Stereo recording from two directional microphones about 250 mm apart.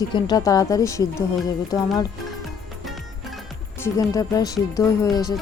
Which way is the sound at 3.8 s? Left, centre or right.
Centre.